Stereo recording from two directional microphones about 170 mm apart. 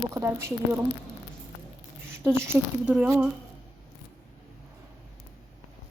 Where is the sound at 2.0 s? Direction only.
15° right (ahead or behind).